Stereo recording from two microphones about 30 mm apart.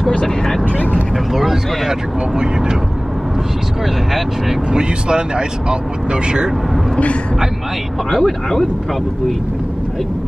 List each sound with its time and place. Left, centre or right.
1.1 s speech: centre
1.9 s speech: right
4.7 s speech: right
8.1 s speech: centre